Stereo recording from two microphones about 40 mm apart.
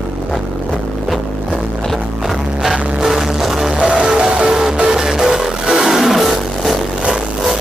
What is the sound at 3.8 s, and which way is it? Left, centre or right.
Music, right.